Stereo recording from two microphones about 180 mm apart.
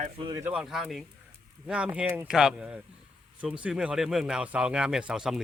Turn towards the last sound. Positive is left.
turn(degrees=-5)  # may be behind; listen again after turning